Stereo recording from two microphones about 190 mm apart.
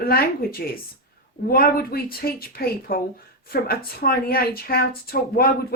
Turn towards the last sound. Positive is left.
turn(degrees=50)  # may be behind; listen again after turning